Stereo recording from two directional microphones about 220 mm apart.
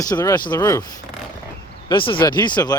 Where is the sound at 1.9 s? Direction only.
20° left (ahead or behind).